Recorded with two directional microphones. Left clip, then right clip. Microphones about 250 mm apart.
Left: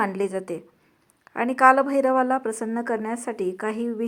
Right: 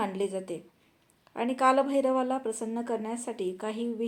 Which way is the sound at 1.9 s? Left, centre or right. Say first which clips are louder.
Left 6 dB; centre.